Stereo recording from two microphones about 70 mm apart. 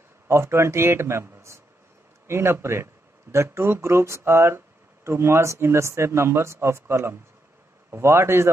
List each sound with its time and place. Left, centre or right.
0.3 s speech: right